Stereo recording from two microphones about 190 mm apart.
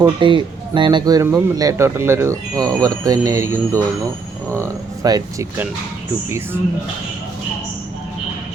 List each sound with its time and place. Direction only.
0.0 s speech: 25° right (ahead or behind)